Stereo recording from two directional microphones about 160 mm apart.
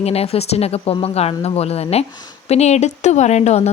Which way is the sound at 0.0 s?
40° left (ahead or behind).